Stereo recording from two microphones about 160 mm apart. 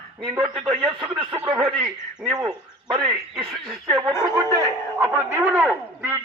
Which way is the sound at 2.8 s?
25° right (ahead or behind).